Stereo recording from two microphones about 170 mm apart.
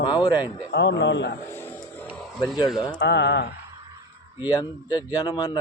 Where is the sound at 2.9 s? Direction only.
90° left.